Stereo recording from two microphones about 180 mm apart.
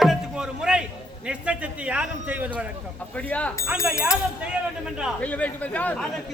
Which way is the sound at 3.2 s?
5° left (ahead or behind).